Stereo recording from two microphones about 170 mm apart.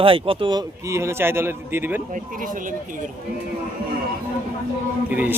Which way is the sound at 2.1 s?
50° right (ahead or behind).